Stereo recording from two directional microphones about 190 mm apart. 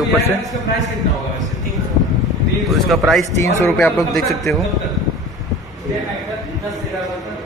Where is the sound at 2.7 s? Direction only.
Centre (ahead or behind).